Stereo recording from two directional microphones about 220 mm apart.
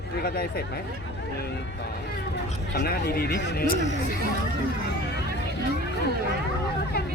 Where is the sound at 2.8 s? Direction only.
45° left (ahead or behind).